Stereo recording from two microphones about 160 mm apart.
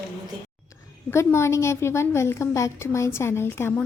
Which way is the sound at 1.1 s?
15° left (ahead or behind).